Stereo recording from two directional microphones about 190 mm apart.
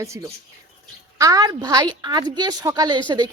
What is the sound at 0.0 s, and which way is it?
A woman's voice, 15° right (ahead or behind).